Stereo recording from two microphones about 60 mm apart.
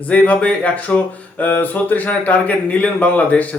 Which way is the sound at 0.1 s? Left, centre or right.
Left.